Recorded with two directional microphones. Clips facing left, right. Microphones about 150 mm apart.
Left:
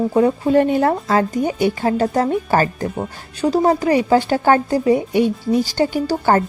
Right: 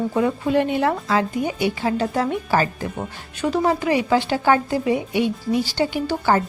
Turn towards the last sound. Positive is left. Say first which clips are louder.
# left 3 dB
turn(degrees=45)  # may be behind; listen again after turning